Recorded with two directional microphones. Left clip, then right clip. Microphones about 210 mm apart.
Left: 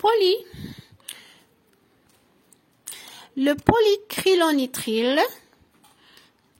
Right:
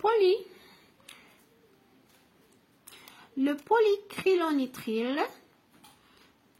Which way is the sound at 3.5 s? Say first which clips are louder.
Left 5 dB; 35° left (ahead or behind).